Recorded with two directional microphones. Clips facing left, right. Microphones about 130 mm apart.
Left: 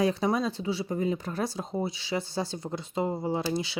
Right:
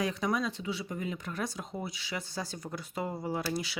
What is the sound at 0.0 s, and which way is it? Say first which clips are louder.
Speech: left 5 dB; 30° left (ahead or behind).